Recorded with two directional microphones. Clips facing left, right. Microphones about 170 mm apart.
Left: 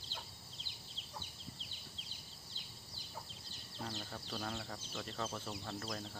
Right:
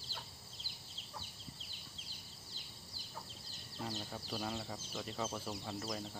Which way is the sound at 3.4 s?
Centre (ahead or behind).